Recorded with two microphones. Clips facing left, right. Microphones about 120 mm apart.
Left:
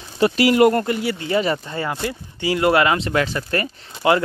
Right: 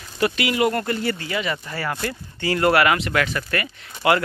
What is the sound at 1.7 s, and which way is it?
Speech, 20° left (ahead or behind).